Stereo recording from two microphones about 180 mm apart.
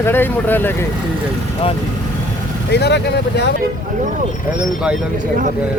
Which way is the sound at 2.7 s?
65° left (ahead or behind).